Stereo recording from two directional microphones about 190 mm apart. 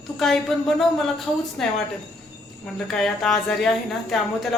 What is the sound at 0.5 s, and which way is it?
A woman's voice, centre (ahead or behind).